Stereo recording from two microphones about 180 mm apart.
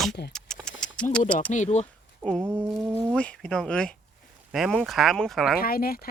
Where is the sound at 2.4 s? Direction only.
10° right (ahead or behind).